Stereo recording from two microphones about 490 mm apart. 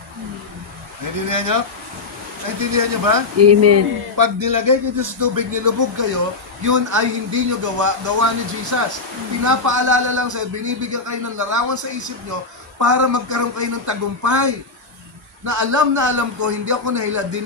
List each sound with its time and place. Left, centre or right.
1.3 s speech: right
2.7 s speech: right